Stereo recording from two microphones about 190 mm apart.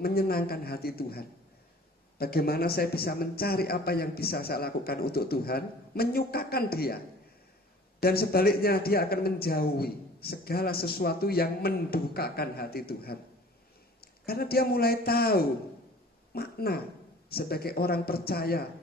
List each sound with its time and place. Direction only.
0.0 s a man's voice: 55° left (ahead or behind)
8.0 s a man's voice: 55° left (ahead or behind)